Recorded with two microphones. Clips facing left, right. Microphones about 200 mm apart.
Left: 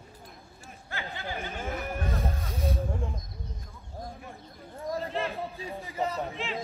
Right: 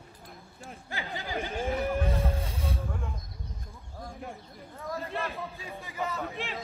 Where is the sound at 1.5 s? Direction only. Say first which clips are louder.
Right 9 dB; 30° right (ahead or behind).